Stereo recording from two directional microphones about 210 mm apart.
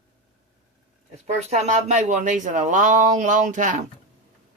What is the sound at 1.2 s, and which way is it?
Speech, 30° right (ahead or behind).